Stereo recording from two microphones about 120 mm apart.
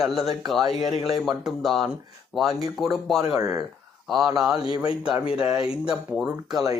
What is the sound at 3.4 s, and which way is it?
Speech, 25° right (ahead or behind).